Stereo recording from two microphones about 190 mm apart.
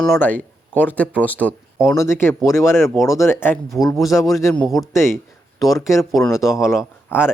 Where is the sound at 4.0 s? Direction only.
Centre (ahead or behind).